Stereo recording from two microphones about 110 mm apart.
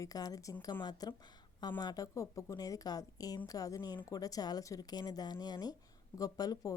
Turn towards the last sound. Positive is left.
turn(degrees=35)  # may be behind; listen again after turning